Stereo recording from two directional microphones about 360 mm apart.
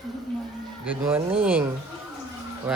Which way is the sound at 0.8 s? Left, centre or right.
Centre.